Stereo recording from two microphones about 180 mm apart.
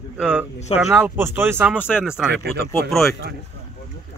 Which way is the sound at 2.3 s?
65° right (ahead or behind).